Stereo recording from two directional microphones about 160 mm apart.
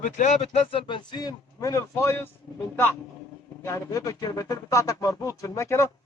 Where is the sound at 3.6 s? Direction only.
20° left (ahead or behind).